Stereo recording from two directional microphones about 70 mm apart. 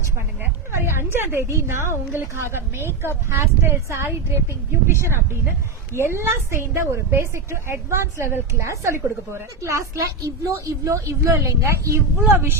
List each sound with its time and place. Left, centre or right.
0.7 s a woman's voice: right